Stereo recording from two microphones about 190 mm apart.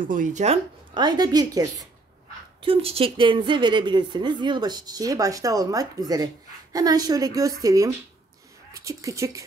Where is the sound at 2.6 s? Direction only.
30° right (ahead or behind).